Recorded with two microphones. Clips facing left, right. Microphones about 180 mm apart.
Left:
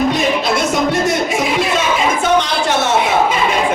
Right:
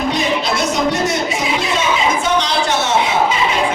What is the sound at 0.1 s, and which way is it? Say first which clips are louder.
Music: left 2 dB; 50° left (ahead or behind).